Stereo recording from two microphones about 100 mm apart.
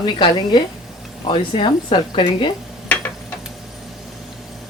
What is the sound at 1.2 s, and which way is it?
Speech, 60° left (ahead or behind).